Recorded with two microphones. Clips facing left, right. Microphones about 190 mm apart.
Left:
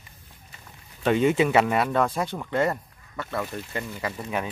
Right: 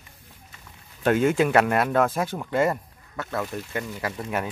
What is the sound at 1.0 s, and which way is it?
Speech, centre (ahead or behind).